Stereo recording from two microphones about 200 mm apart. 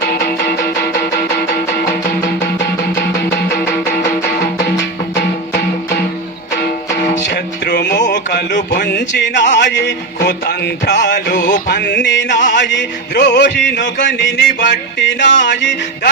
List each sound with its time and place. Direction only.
4.0 s music: 15° left (ahead or behind)
7.3 s music: 55° left (ahead or behind)
8.1 s a sound: 60° left (ahead or behind)
8.5 s speech: 45° left (ahead or behind); by 9.9 s 60° left (ahead or behind)
10.2 s music: 55° left (ahead or behind)
11.3 s music: 40° left (ahead or behind)
11.7 s music: 60° left (ahead or behind)